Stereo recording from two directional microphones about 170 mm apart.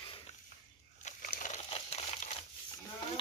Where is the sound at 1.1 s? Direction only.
50° left (ahead or behind).